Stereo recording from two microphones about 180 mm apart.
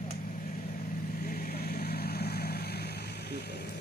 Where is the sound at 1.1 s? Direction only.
55° left (ahead or behind).